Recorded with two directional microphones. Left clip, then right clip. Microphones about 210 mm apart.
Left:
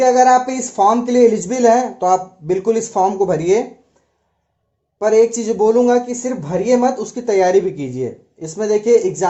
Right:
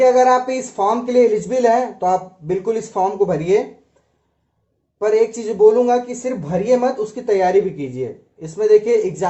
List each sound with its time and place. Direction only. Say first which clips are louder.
0.0 s speech: left 1 dB; 40° left (ahead or behind)
5.1 s speech: left 4 dB; 35° left (ahead or behind)